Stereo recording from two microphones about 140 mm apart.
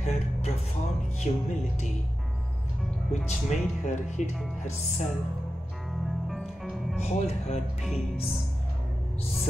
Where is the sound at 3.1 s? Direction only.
55° left (ahead or behind).